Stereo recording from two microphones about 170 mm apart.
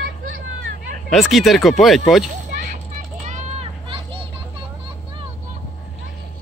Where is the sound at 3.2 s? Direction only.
40° right (ahead or behind).